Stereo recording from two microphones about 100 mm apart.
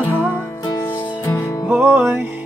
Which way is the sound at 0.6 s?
35° left (ahead or behind).